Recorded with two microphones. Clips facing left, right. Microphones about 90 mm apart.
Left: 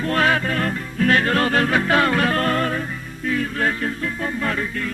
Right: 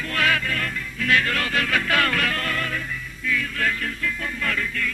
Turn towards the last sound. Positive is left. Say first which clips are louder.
# left 3 dB
turn(degrees=30)  # may be behind; listen again after turning